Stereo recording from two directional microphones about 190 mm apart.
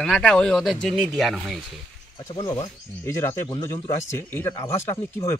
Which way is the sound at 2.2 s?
15° left (ahead or behind).